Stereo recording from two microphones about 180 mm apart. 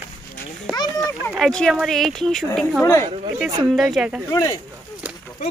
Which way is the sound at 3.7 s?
Centre (ahead or behind).